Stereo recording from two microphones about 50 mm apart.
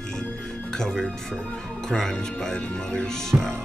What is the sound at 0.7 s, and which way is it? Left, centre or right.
Speech, centre.